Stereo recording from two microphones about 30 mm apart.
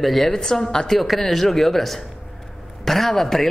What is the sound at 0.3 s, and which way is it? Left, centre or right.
Speech, centre.